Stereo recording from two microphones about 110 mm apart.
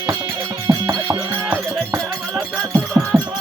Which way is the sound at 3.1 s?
25° right (ahead or behind).